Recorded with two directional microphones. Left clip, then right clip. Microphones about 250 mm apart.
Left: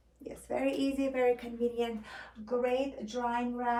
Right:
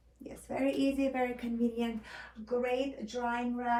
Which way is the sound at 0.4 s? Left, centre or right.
Centre.